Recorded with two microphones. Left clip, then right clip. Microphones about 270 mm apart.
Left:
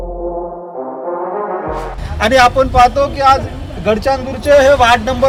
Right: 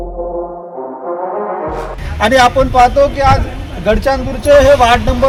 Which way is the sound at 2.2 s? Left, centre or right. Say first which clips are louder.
Even; centre.